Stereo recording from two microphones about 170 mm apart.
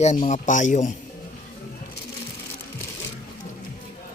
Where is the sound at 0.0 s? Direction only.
45° left (ahead or behind).